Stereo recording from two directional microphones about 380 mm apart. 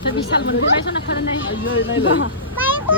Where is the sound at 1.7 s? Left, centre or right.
Left.